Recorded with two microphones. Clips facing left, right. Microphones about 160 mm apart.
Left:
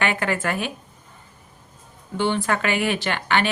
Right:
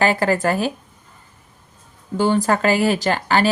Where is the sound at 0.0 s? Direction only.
35° right (ahead or behind).